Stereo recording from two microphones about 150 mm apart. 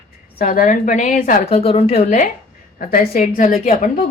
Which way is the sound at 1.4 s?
40° left (ahead or behind).